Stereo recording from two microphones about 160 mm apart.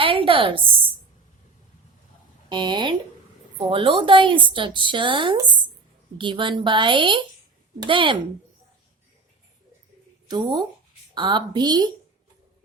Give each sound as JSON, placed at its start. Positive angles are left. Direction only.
{"t": 0.0, "sound": "a sound", "side_deg": -35}
{"t": 2.5, "sound": "a woman's voice", "side_deg": -30}
{"t": 10.2, "sound": "a woman's voice", "side_deg": -25}